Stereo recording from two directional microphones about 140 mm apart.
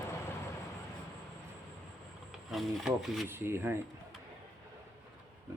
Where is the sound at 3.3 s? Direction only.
15° right (ahead or behind).